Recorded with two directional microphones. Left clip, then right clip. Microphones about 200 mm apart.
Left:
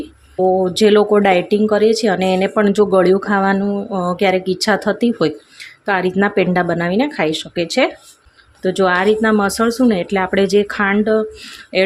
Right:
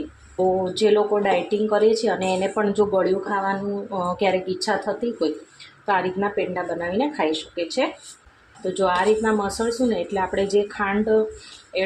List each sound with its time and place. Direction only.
0.6 s speech: 50° left (ahead or behind)
4.0 s speech: 40° left (ahead or behind); by 5.3 s 60° left (ahead or behind)
5.8 s speech: 40° left (ahead or behind)